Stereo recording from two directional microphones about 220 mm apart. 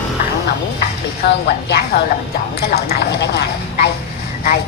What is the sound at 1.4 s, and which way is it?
Speech, 45° left (ahead or behind).